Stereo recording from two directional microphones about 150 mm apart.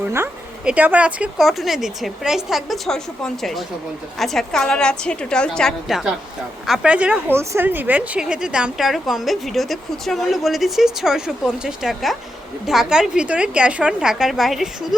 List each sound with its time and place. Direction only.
0.0 s a woman's voice: 15° right (ahead or behind)